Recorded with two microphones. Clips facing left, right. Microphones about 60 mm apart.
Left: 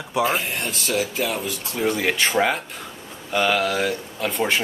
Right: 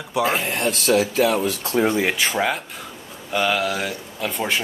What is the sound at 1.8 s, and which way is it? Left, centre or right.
Speech, right.